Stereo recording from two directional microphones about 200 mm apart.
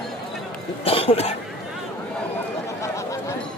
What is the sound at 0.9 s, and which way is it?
Speech, 30° left (ahead or behind).